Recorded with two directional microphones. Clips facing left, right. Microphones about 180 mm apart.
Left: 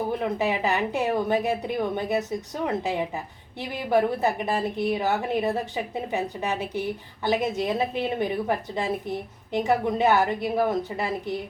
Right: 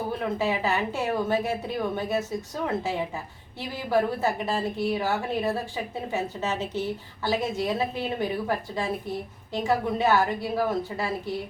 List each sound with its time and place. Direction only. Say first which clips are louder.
0.2 s a woman's voice: left 1 dB; 20° left (ahead or behind)